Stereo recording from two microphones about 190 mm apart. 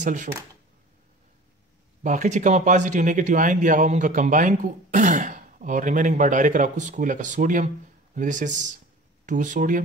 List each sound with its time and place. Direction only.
0.0 s speech: 40° right (ahead or behind)
2.0 s speech: 40° right (ahead or behind)